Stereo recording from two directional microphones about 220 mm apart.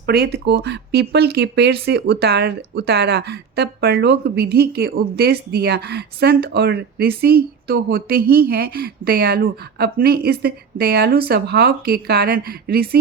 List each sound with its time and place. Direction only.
0.0 s speech: 45° right (ahead or behind)